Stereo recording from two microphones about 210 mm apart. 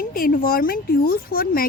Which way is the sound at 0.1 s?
45° left (ahead or behind).